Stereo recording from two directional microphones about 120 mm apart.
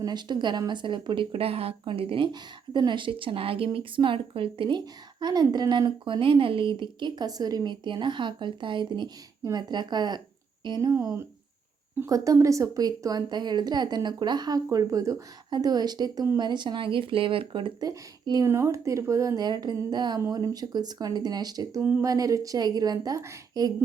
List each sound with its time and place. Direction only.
0.0 s speech: 35° right (ahead or behind)
5.2 s a woman's voice: 35° right (ahead or behind)
10.9 s a woman's voice: 20° right (ahead or behind); by 17.8 s 45° right (ahead or behind)
17.8 s a woman's voice: 30° right (ahead or behind)